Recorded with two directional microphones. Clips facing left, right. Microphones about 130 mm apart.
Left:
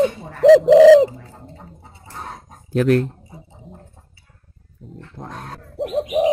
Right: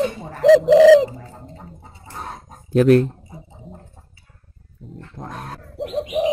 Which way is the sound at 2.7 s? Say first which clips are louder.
Right 3 dB; 20° right (ahead or behind).